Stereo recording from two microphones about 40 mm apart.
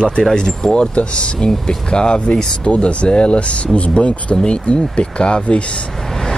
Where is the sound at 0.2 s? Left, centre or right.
Centre.